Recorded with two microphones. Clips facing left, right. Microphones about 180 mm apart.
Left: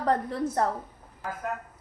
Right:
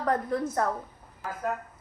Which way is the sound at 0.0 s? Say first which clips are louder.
Left 1 dB; 35° left (ahead or behind).